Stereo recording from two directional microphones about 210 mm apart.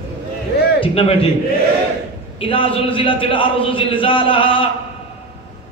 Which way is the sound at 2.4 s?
25° left (ahead or behind).